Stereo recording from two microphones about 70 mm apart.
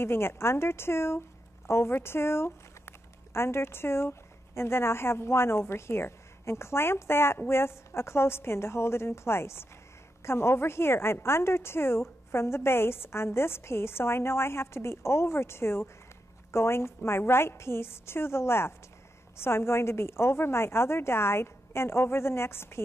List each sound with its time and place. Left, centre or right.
0.0 s speech: left